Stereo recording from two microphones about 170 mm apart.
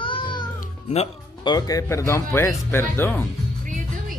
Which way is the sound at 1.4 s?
20° left (ahead or behind).